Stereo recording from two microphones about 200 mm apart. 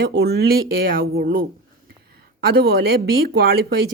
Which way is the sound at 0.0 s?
55° right (ahead or behind).